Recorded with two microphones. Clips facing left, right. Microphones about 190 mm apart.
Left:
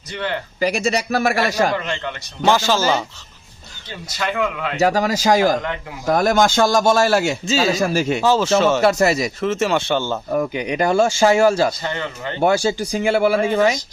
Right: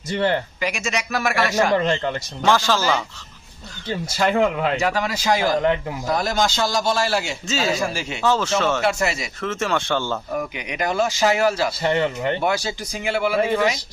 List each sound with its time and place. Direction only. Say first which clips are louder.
0.1 s speech: right 5 dB; 35° right (ahead or behind)
0.6 s speech: left 6 dB; 35° left (ahead or behind)
1.7 s speech: right 5 dB; 35° right (ahead or behind)
2.4 s speech: left 3 dB; 25° left (ahead or behind)
4.0 s speech: right 3 dB; 40° right (ahead or behind)
4.8 s speech: left 5 dB; 40° left (ahead or behind)
8.2 s speech: left 1 dB; 10° left (ahead or behind)
8.8 s speech: left 6 dB; 40° left (ahead or behind)
9.4 s speech: left 2 dB; 25° left (ahead or behind)
10.3 s speech: left 7 dB; 35° left (ahead or behind)
11.8 s speech: right 6 dB; 25° right (ahead or behind)
12.4 s speech: left 6 dB; 30° left (ahead or behind)